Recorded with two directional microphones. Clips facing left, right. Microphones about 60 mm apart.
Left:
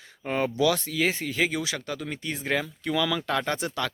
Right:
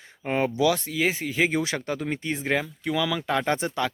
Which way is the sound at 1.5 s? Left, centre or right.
Right.